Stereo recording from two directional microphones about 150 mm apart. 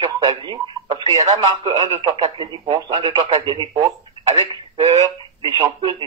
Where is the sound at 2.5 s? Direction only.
25° right (ahead or behind).